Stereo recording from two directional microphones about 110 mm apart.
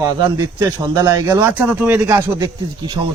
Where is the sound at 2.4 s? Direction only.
45° right (ahead or behind).